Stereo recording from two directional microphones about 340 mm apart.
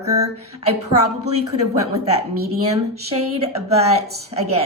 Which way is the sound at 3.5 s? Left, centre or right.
Centre.